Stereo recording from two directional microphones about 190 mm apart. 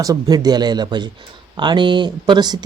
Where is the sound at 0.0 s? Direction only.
20° right (ahead or behind).